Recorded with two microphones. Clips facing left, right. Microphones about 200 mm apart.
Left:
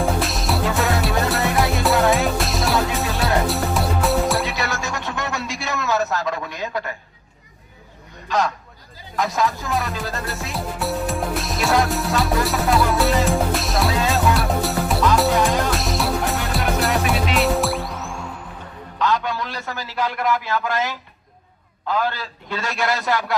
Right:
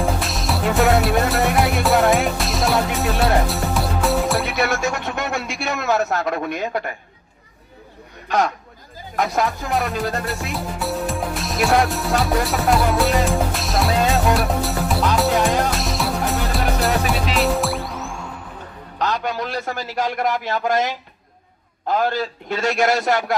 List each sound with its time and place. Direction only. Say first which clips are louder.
0.0 s music: left 1 dB; centre (ahead or behind)
4.7 s a man's voice: right 4 dB; 55° right (ahead or behind)
9.3 s a man's voice: even; 55° right (ahead or behind)
10.2 s music: right 2 dB; centre (ahead or behind)
18.9 s a man's voice: left 1 dB; 45° right (ahead or behind)